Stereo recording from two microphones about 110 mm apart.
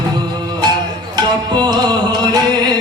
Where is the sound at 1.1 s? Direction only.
40° right (ahead or behind).